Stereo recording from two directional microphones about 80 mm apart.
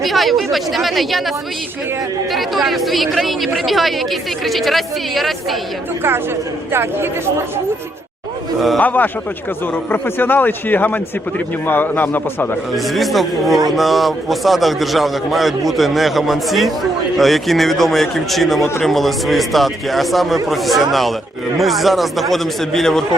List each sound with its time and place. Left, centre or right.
0.0 s a man's voice: centre
2.3 s a man's voice: centre
6.7 s a man's voice: right
8.8 s a man's voice: left
12.7 s a man's voice: centre